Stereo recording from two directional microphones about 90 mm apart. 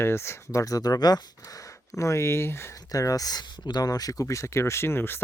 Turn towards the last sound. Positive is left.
turn(degrees=25)  # may be behind; listen again after turning